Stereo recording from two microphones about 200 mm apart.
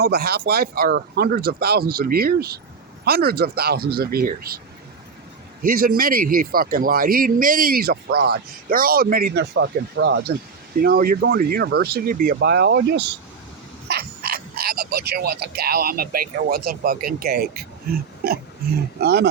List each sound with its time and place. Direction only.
0.0 s speech: 50° right (ahead or behind)
5.6 s speech: 45° right (ahead or behind)
10.8 s speech: 50° right (ahead or behind)